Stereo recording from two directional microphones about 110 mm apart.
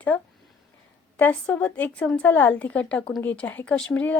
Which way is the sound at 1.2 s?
15° left (ahead or behind).